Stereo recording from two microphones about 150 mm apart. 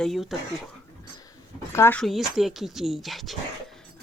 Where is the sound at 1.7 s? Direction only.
15° left (ahead or behind).